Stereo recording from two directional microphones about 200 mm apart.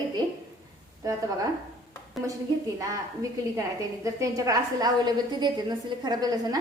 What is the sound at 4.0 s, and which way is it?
A woman's voice, 15° right (ahead or behind).